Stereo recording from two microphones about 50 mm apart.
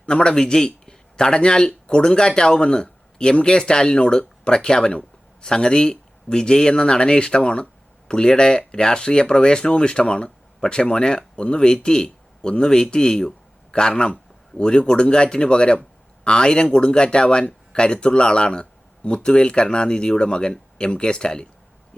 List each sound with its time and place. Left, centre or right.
0.0 s a man's voice: centre